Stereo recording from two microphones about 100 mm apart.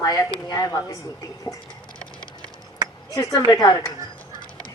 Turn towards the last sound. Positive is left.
turn(degrees=40)  # may be behind; listen again after turning